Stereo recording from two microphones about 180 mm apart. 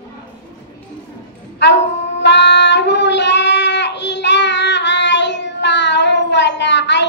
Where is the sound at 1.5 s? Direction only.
75° left (ahead or behind).